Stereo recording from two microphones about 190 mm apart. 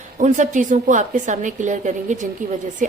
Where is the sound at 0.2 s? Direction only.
40° right (ahead or behind).